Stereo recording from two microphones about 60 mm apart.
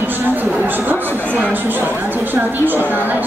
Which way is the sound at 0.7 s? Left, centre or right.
Right.